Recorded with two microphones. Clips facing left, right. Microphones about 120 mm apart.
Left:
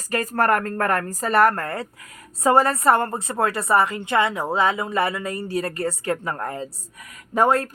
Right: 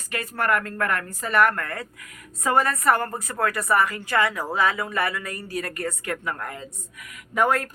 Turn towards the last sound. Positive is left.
turn(degrees=30)  # may be behind; listen again after turning